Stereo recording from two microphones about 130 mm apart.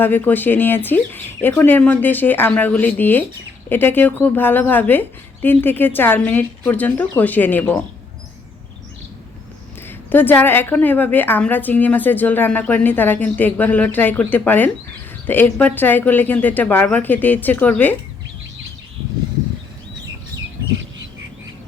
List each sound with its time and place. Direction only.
0.0 s a woman's voice: 15° left (ahead or behind)
9.8 s a woman's voice: 15° left (ahead or behind)